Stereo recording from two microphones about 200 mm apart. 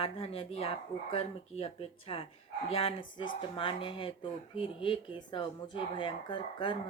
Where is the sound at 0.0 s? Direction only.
30° left (ahead or behind).